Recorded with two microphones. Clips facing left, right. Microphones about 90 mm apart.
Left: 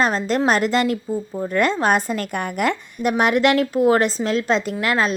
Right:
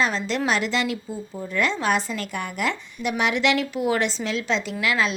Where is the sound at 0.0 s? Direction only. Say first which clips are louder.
Left 5 dB; 45° left (ahead or behind).